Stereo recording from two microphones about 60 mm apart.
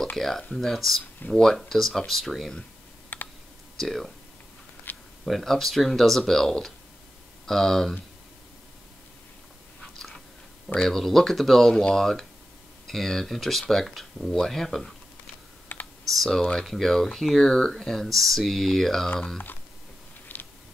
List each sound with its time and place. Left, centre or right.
0.2 s speech: centre
3.1 s computer keyboard: left
3.8 s speech: centre
4.9 s a sound: left
5.2 s speech: centre
10.8 s speech: centre
15.7 s computer keyboard: left
16.1 s speech: centre
20.3 s a sound: left